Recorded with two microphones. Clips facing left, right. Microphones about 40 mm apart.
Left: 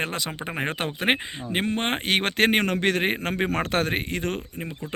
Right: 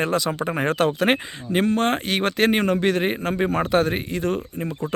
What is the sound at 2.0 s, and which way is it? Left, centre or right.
A man's voice, left.